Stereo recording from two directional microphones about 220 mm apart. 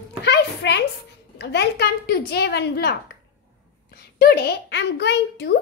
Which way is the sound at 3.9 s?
45° left (ahead or behind).